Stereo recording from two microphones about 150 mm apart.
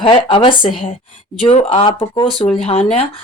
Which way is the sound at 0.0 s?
35° left (ahead or behind).